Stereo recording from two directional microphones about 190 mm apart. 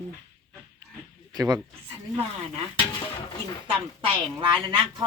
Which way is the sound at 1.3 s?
20° right (ahead or behind).